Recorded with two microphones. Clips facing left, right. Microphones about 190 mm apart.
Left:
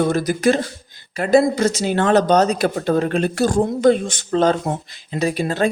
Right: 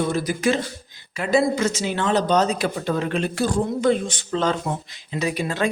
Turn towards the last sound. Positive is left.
turn(degrees=35)  # may be behind; listen again after turning